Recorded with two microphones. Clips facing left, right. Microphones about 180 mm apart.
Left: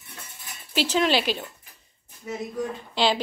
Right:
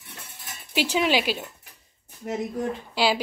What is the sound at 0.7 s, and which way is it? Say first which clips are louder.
Speech: even; 10° right (ahead or behind).